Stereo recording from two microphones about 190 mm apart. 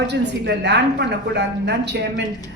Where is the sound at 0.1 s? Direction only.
65° right (ahead or behind).